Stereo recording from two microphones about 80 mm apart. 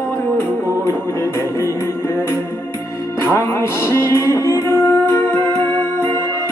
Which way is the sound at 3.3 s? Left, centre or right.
Left.